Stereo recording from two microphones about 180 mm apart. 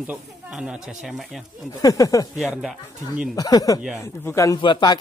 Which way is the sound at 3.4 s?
20° left (ahead or behind).